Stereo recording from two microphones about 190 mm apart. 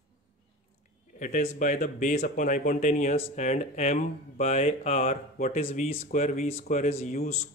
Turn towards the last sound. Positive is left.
turn(degrees=35)  # may be behind; listen again after turning